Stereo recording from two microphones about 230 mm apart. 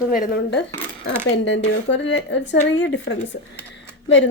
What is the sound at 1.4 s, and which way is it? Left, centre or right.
Speech, left.